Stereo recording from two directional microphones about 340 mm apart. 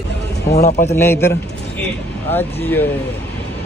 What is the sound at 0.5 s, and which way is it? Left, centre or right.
Speech, left.